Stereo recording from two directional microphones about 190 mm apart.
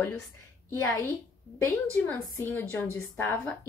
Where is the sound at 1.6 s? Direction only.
10° left (ahead or behind).